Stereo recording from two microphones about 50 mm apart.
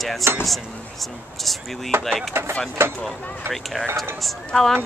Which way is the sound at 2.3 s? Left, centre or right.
Right.